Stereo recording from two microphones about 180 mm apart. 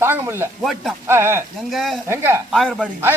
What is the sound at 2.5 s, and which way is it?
Speech, centre (ahead or behind).